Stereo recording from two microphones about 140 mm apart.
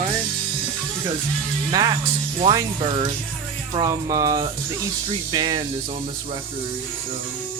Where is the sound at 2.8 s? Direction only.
40° right (ahead or behind).